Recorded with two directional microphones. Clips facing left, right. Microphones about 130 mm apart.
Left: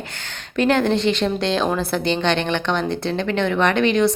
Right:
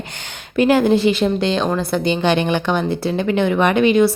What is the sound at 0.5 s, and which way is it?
Speech, 5° right (ahead or behind).